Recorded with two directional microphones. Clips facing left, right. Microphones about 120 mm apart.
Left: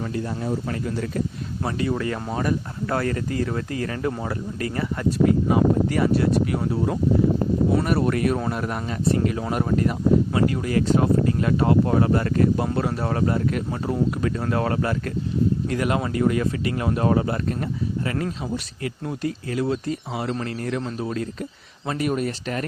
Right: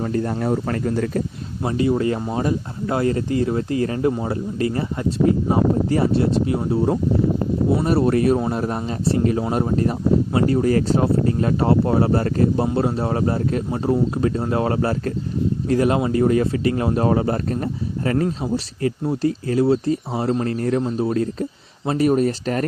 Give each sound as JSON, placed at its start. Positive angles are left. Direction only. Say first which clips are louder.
{"t": 0.0, "sound": "speech", "louder": "right 5 dB", "side_deg": -45}
{"t": 1.6, "sound": "speech", "louder": "right 6 dB", "side_deg": -25}